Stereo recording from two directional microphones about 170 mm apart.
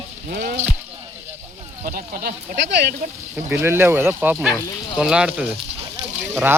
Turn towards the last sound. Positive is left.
turn(degrees=-10)  # may be behind; listen again after turning